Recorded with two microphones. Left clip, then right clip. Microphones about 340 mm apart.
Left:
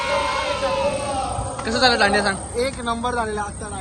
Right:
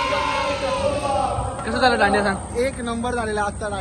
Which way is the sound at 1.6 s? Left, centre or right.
Centre.